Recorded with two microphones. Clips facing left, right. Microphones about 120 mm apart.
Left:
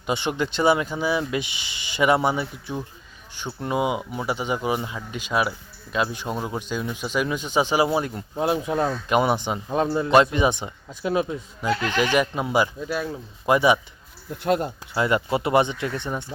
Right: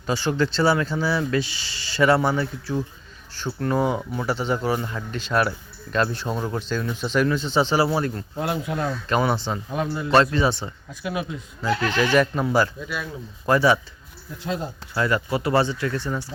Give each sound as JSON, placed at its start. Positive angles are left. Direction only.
{"t": 0.0, "sound": "speech", "side_deg": 20}
{"t": 9.0, "sound": "speech", "side_deg": 15}
{"t": 11.0, "sound": "speech", "side_deg": 30}
{"t": 11.8, "sound": "speech", "side_deg": 15}
{"t": 14.4, "sound": "speech", "side_deg": 60}
{"t": 14.9, "sound": "speech", "side_deg": 20}